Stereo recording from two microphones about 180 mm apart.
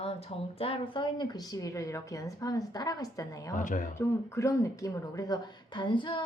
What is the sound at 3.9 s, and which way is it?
A woman's voice, 15° left (ahead or behind).